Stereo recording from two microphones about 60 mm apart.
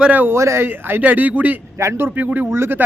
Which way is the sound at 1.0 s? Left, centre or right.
Right.